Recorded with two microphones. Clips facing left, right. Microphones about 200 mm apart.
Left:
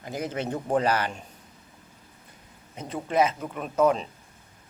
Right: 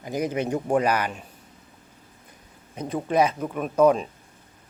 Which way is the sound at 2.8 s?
15° right (ahead or behind).